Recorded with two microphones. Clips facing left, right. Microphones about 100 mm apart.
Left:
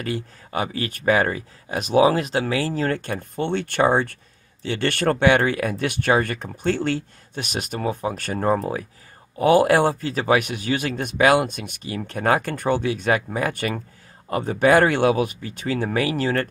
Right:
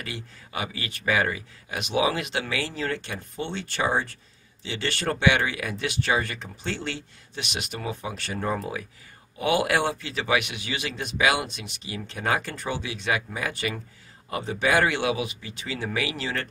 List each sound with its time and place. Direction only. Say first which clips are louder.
0.0 s a man's voice: left 9 dB; 40° left (ahead or behind)